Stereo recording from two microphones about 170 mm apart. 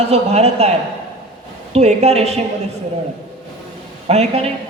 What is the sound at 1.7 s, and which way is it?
Speech, 40° right (ahead or behind).